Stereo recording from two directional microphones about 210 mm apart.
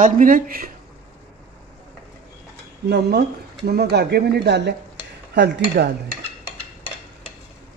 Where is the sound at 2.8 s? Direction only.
50° right (ahead or behind).